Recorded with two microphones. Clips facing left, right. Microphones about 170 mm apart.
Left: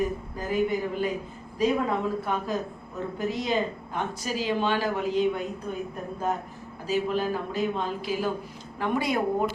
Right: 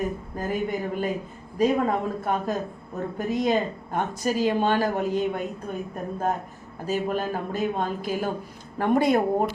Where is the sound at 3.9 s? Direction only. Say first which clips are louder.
Right 6 dB; 50° right (ahead or behind).